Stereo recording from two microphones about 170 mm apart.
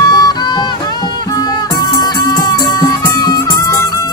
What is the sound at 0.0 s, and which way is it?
Music, 20° left (ahead or behind).